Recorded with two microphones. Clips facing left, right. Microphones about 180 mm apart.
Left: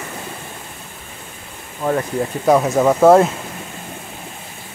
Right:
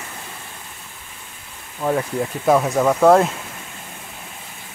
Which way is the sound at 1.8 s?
5° right (ahead or behind).